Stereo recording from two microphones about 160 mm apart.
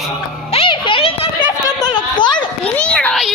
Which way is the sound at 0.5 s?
35° left (ahead or behind).